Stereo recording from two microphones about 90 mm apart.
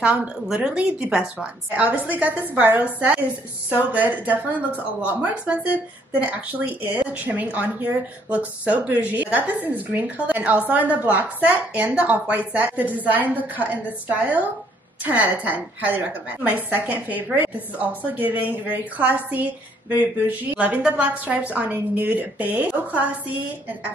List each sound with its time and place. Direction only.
0.0 s a woman's voice: 10° right (ahead or behind)